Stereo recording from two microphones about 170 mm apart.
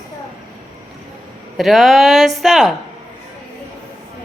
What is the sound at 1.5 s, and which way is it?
A woman's voice, centre (ahead or behind).